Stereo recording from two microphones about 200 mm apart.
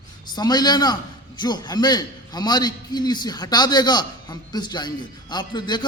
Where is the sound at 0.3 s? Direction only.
20° left (ahead or behind).